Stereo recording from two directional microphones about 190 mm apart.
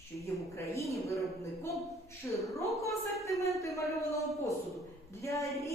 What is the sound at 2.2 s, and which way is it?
A woman's voice, 15° left (ahead or behind).